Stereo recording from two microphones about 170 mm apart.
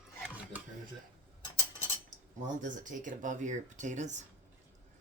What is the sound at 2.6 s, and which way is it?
Speech, 50° right (ahead or behind).